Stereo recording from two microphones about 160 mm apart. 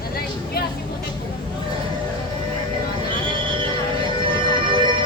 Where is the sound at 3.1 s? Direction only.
30° right (ahead or behind).